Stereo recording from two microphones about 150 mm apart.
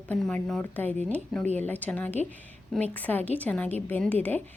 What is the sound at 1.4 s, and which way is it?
Speech, 50° right (ahead or behind).